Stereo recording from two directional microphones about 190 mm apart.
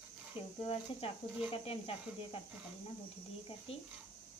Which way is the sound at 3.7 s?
30° left (ahead or behind).